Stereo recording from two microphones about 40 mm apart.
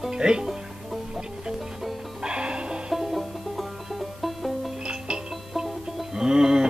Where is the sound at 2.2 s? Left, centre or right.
Right.